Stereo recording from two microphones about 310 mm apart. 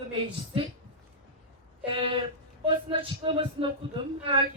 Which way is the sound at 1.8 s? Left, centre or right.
Centre.